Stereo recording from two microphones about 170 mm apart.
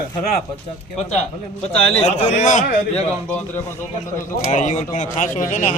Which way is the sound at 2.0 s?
45° left (ahead or behind).